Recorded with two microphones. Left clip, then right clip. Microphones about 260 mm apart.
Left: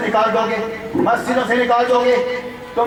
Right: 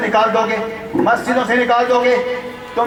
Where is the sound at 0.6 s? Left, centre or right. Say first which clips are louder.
Right 1 dB; centre.